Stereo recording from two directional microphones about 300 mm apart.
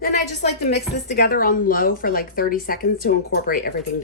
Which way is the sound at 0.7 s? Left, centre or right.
Left.